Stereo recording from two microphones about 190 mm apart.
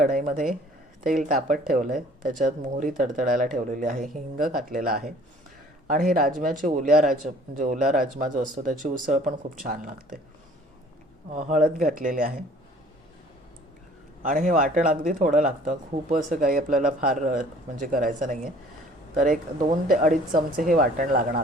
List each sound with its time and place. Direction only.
0.0 s speech: 45° right (ahead or behind)
6.3 s speech: 40° right (ahead or behind)
11.3 s speech: 40° right (ahead or behind)
14.2 s speech: 45° right (ahead or behind)